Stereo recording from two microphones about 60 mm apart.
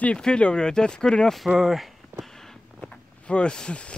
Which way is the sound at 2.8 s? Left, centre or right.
Centre.